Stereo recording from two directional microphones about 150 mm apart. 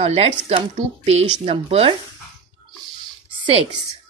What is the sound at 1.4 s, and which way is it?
Speech, 40° right (ahead or behind).